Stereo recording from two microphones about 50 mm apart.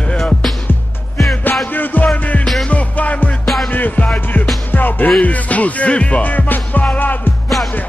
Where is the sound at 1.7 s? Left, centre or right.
Left.